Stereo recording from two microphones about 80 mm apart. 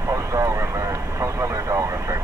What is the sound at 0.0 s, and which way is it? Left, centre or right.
Vehicle, right.